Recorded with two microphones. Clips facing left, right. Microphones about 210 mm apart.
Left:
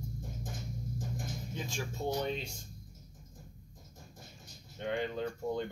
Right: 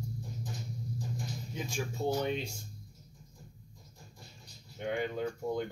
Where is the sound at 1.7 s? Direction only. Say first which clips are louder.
Right 3 dB; 10° right (ahead or behind).